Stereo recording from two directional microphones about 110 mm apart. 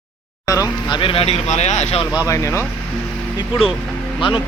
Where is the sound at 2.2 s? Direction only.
30° left (ahead or behind).